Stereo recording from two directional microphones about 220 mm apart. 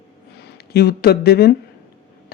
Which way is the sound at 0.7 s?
45° left (ahead or behind).